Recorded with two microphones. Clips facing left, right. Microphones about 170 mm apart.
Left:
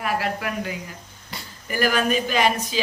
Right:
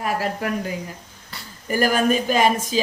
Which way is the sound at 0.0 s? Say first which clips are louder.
Right 1 dB; 40° right (ahead or behind).